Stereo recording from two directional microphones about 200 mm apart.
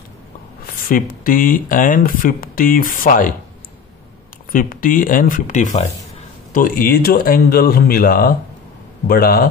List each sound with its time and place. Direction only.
0.8 s speech: 45° left (ahead or behind)
4.5 s speech: 45° left (ahead or behind)